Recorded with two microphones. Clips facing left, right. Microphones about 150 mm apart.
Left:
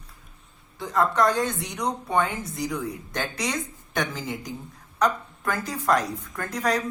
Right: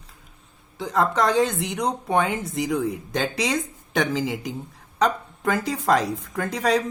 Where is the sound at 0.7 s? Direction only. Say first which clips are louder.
Right 1 dB; 90° right.